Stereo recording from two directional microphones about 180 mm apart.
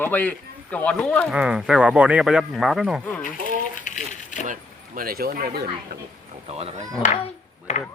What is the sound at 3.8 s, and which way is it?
Coin, 45° left (ahead or behind).